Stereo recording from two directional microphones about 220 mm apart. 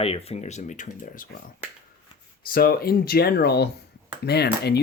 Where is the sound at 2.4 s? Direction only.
40° left (ahead or behind).